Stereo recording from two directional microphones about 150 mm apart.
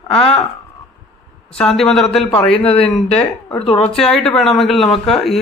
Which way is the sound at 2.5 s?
40° left (ahead or behind).